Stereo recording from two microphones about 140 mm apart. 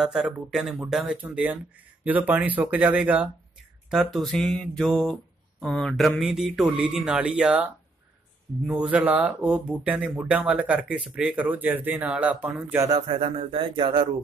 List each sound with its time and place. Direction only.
0.0 s mantra: 5° right (ahead or behind)
2.0 s speech: 10° right (ahead or behind)
3.9 s mantra: centre (ahead or behind)
8.6 s speech: 10° right (ahead or behind)
13.0 s speech: 40° right (ahead or behind)